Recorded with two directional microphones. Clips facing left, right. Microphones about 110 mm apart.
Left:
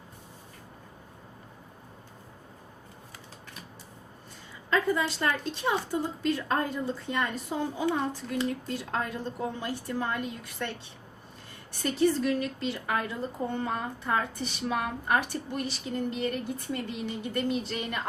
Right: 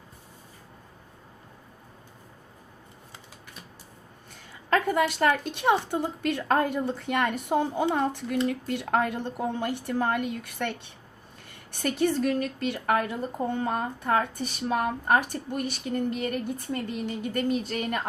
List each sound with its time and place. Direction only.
4.7 s a woman's voice: 65° right (ahead or behind); by 18.0 s 45° right (ahead or behind)